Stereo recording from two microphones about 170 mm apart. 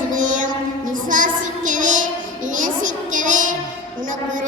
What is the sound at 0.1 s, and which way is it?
Mantra, 50° right (ahead or behind).